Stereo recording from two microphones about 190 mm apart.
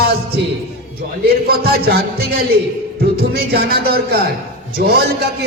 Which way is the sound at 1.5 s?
55° right (ahead or behind).